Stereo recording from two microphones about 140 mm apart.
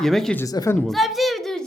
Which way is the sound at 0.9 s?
Centre (ahead or behind).